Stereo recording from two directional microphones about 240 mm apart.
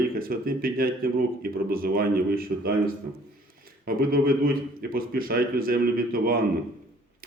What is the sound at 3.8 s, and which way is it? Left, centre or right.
Speech, right.